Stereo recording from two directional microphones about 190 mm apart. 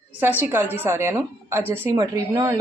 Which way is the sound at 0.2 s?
10° right (ahead or behind).